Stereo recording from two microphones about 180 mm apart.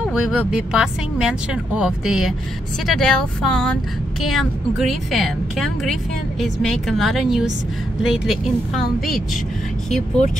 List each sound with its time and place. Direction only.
0.0 s speech: 5° right (ahead or behind)